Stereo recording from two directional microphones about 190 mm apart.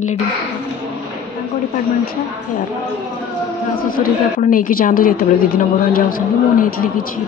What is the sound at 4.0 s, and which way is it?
A woman's voice, 45° left (ahead or behind).